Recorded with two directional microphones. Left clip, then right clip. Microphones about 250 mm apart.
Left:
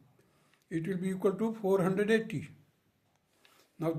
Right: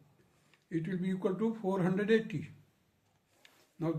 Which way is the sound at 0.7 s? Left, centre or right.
Left.